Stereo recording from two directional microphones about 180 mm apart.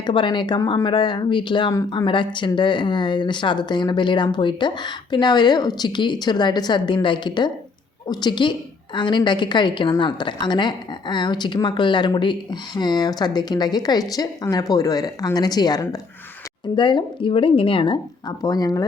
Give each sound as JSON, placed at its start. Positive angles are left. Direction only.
{"t": 0.0, "sound": "speech", "side_deg": 25}